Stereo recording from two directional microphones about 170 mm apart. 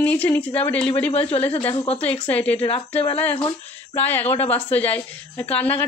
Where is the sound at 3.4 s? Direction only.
35° left (ahead or behind).